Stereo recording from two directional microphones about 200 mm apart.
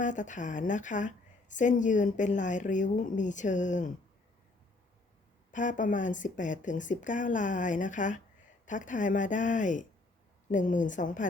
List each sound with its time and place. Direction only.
0.0 s a woman's voice: 40° left (ahead or behind)
5.5 s a woman's voice: 40° left (ahead or behind)